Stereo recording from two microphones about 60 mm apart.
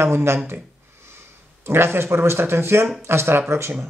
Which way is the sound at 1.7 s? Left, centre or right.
Right.